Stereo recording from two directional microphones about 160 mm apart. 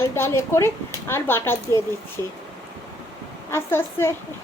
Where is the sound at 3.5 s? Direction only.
15° left (ahead or behind).